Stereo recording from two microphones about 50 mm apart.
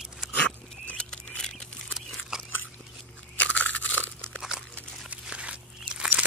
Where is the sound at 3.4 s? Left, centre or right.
Left.